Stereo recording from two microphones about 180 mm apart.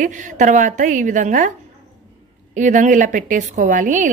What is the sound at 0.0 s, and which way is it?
A woman's voice, 45° right (ahead or behind).